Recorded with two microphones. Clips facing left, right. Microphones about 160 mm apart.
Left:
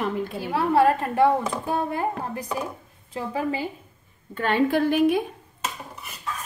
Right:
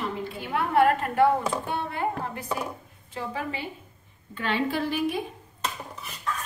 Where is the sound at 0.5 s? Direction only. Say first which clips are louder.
Left 2 dB; 30° left (ahead or behind).